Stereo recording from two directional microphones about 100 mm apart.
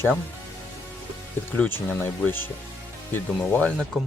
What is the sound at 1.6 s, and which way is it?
Speech, 20° left (ahead or behind).